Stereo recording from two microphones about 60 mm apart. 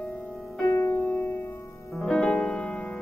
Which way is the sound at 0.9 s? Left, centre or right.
Left.